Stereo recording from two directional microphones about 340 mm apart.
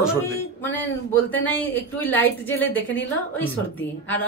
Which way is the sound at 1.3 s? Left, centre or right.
Centre.